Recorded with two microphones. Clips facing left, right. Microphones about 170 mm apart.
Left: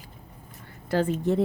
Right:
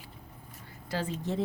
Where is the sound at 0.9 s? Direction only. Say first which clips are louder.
Left 9 dB; 55° left (ahead or behind).